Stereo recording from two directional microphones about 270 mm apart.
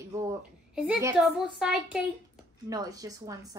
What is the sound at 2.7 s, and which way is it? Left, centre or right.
Speech, centre.